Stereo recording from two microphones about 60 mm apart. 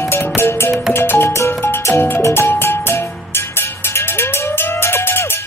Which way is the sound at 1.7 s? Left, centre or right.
Left.